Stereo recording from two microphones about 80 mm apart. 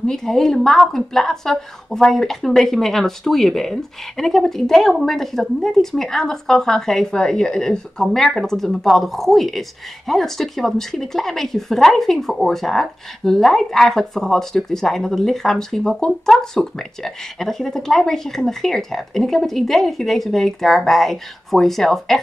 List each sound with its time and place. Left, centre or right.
0.0 s a woman's voice: centre